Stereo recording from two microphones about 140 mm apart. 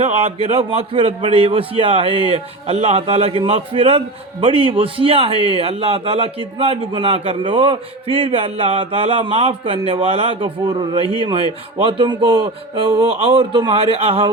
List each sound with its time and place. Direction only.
0.0 s a man's voice: 45° right (ahead or behind)
10.7 s a man's voice: 35° right (ahead or behind)